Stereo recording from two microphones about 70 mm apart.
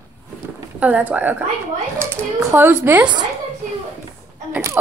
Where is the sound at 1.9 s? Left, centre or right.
Right.